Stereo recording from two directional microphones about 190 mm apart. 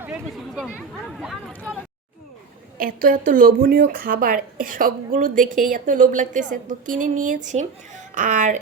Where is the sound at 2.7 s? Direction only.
50° right (ahead or behind).